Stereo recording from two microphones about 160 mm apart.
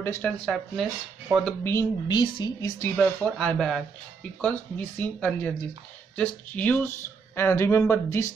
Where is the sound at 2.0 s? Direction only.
30° left (ahead or behind).